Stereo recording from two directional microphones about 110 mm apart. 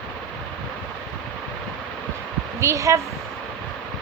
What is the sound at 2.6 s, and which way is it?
Speech, 30° right (ahead or behind).